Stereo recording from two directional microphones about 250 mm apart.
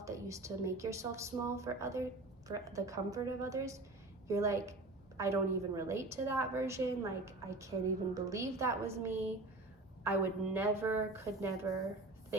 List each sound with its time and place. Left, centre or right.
0.0 s a woman's voice: centre